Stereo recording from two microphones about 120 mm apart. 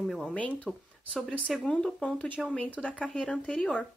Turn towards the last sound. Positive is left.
turn(degrees=10)  # may be behind; listen again after turning